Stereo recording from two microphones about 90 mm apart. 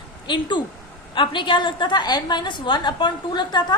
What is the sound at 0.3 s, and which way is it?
A woman's voice, 60° left (ahead or behind).